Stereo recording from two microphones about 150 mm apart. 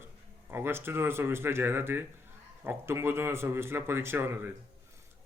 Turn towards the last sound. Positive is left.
turn(degrees=-15)  # may be behind; listen again after turning